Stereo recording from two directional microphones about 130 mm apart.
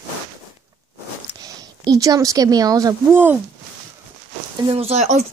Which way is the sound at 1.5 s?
25° right (ahead or behind).